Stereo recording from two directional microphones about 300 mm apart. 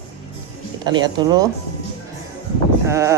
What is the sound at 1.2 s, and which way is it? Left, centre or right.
Speech, centre.